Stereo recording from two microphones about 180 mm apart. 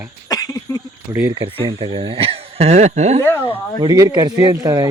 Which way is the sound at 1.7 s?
25° right (ahead or behind).